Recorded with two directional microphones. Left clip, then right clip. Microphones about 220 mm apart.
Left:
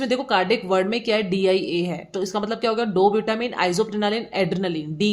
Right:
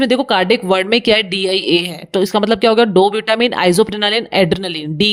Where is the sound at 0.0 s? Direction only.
40° right (ahead or behind).